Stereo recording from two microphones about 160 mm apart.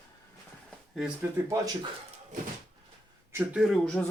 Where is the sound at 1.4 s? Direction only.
15° right (ahead or behind).